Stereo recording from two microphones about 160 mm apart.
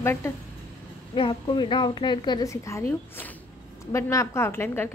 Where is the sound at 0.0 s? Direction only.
15° left (ahead or behind).